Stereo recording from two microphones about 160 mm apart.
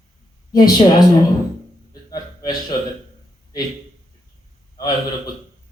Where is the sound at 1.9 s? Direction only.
25° left (ahead or behind).